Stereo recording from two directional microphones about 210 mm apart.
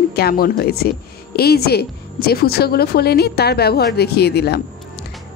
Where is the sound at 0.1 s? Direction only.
45° left (ahead or behind).